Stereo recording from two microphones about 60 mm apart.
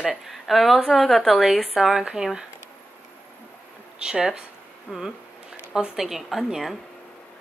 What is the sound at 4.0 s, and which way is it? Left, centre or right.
A woman's voice, centre.